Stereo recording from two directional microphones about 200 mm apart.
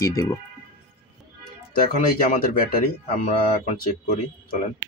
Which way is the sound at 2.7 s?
40° left (ahead or behind).